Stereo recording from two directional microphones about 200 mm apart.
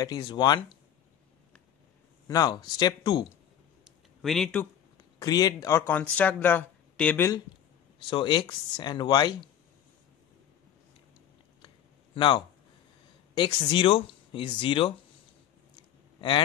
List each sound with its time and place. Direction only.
0.0 s speech: 20° left (ahead or behind)
2.2 s speech: 20° left (ahead or behind)
3.8 s a sound: centre (ahead or behind)
5.2 s speech: 20° left (ahead or behind)
11.6 s a sound: 25° left (ahead or behind)
13.3 s speech: 20° left (ahead or behind)
16.2 s speech: 25° left (ahead or behind)